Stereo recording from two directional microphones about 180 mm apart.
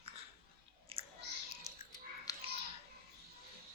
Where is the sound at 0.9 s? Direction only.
30° right (ahead or behind).